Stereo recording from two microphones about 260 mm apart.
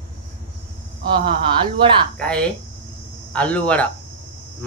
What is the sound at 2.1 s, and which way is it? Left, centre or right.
Speech, centre.